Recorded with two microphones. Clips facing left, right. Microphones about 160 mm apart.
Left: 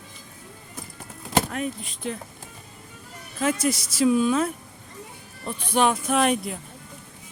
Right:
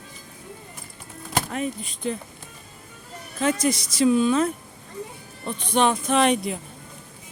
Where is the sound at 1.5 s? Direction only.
Centre (ahead or behind).